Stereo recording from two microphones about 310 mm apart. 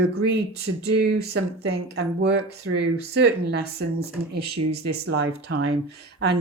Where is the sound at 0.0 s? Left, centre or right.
Right.